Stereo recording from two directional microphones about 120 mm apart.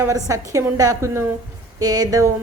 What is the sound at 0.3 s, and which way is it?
A woman's voice, 30° right (ahead or behind).